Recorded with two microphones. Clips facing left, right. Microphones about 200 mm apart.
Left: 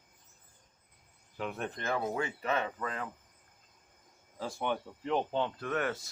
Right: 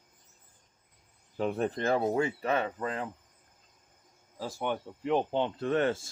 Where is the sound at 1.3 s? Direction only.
35° right (ahead or behind).